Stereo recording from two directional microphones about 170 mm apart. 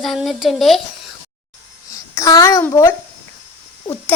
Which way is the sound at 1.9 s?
20° left (ahead or behind).